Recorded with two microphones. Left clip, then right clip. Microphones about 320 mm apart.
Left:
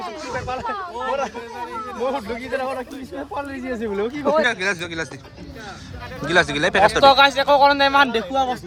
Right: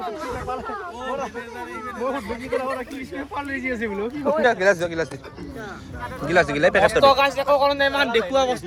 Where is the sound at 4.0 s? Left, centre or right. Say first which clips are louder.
Left 5 dB; left.